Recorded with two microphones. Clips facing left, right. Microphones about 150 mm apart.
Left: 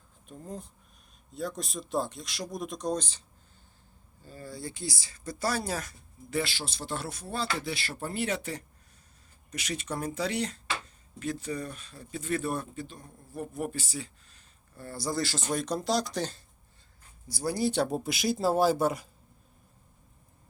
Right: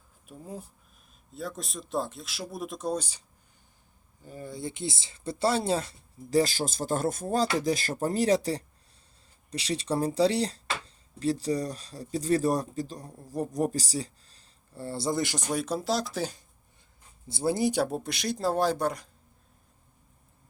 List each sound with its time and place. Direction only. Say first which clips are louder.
0.3 s speech: even; 5° right (ahead or behind); by 6.4 s 30° right (ahead or behind)
6.4 s speech: right 7 dB; 45° right (ahead or behind); by 16.4 s 5° right (ahead or behind)
17.2 s speech: right 3 dB; 25° right (ahead or behind)
17.8 s speech: left 2 dB; centre (ahead or behind)